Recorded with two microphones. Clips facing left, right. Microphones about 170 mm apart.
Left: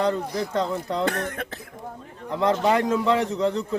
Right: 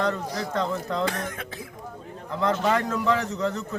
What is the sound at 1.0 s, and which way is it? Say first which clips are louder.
Speech: left 3 dB; 60° left (ahead or behind).